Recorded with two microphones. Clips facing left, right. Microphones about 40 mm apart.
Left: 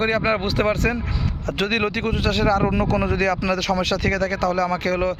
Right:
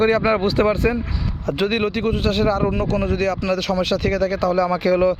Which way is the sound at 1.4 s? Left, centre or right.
Left.